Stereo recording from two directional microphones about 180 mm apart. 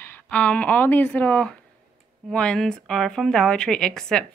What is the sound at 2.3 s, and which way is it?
A woman's voice, 5° left (ahead or behind).